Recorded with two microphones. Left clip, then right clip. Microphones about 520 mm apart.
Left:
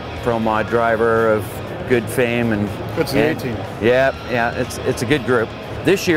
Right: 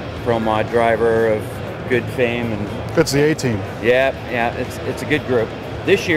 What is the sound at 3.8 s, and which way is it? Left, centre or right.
Speech, left.